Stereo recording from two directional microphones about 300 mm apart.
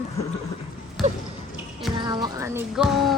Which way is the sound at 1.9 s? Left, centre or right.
Centre.